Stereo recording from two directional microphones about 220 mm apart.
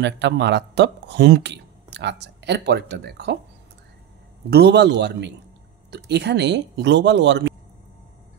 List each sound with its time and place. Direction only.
0.0 s speech: 50° right (ahead or behind)
4.5 s speech: 45° right (ahead or behind)